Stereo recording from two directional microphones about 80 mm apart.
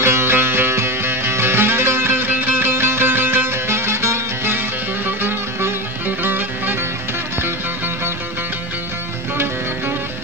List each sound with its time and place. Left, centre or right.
0.0 s music: right